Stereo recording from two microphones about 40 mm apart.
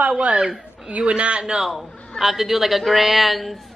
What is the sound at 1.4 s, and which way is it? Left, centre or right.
Speech, centre.